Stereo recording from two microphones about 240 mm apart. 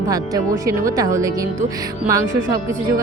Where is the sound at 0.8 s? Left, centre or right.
Centre.